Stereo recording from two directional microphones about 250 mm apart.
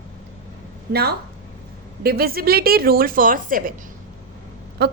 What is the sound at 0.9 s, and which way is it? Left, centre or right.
A woman's voice, right.